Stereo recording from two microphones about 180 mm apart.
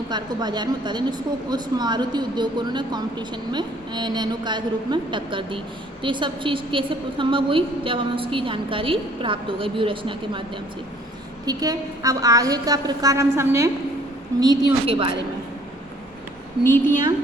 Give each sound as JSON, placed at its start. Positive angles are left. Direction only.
{"t": 0.1, "sound": "a woman's voice", "side_deg": -20}
{"t": 11.4, "sound": "a woman's voice", "side_deg": -20}